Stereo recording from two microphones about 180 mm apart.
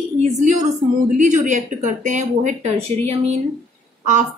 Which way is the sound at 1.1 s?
45° right (ahead or behind).